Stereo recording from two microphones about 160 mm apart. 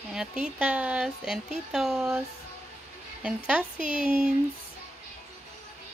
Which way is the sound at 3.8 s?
35° left (ahead or behind).